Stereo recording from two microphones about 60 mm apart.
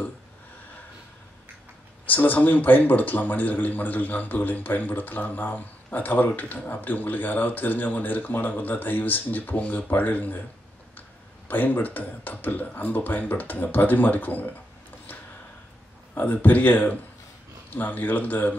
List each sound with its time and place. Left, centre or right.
2.0 s a man's voice: left
16.2 s a man's voice: left